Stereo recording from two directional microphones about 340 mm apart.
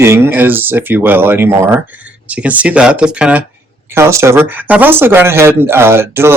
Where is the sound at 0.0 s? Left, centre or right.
Centre.